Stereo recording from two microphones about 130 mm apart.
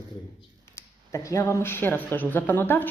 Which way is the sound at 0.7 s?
25° left (ahead or behind).